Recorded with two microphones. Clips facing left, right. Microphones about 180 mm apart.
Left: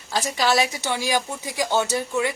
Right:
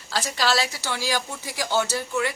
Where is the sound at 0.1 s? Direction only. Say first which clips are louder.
Left 3 dB; 20° left (ahead or behind).